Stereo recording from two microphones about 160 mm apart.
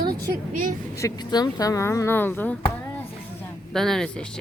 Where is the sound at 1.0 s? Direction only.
25° left (ahead or behind).